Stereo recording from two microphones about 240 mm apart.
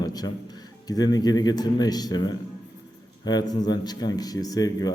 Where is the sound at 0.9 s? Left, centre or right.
Centre.